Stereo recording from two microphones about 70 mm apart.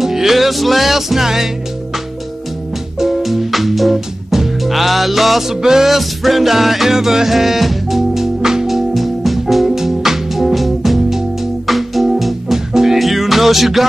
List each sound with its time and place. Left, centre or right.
0.0 s music: centre
3.0 s music: centre